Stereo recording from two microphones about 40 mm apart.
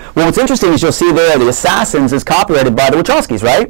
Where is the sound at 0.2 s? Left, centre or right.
Centre.